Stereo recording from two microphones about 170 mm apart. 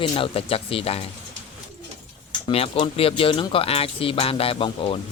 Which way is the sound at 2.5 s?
35° left (ahead or behind).